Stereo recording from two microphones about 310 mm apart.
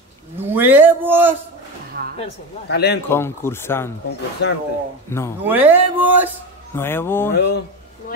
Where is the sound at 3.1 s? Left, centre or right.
Centre.